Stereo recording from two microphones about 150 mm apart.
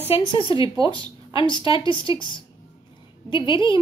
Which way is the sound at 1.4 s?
30° left (ahead or behind).